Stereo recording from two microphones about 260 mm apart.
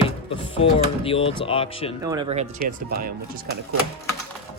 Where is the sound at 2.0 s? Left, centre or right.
Centre.